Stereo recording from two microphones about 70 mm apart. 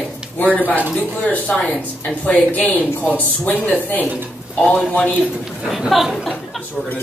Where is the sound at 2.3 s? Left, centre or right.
Left.